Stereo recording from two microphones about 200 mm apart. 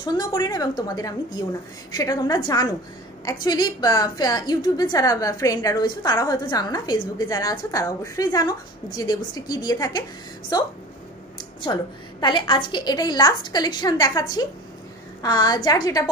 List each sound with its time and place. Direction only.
0.0 s a woman's voice: 20° left (ahead or behind)
15.2 s a woman's voice: 20° left (ahead or behind)